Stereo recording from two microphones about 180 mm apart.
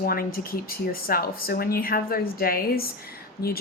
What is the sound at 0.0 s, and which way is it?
Speech, 55° left (ahead or behind).